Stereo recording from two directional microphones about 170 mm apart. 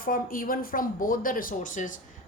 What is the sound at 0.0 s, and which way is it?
A woman's voice, 55° left (ahead or behind).